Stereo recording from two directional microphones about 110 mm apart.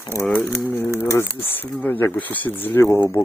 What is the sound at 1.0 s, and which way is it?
Speech, 25° left (ahead or behind).